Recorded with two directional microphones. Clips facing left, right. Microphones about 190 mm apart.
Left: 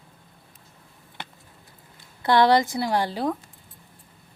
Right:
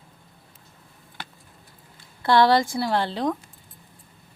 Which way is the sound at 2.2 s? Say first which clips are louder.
Even; 20° left (ahead or behind).